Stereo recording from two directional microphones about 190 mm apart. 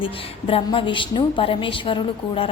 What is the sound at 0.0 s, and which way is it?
A woman's voice, 30° left (ahead or behind).